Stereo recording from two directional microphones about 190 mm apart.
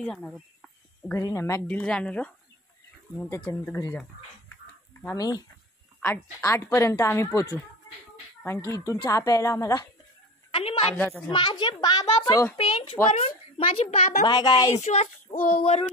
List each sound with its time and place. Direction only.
0.0 s speech: 5° left (ahead or behind)
5.0 s a child's voice: 20° left (ahead or behind)
10.5 s a woman's voice: 30° left (ahead or behind)
11.0 s speech: 10° left (ahead or behind)
11.3 s a child's voice: 25° left (ahead or behind); by 14.2 s 40° left (ahead or behind)
14.2 s a child's voice: 20° left (ahead or behind)
14.8 s speech: 40° left (ahead or behind)